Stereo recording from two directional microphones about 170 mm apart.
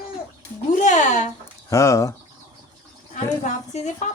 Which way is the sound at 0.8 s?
45° left (ahead or behind).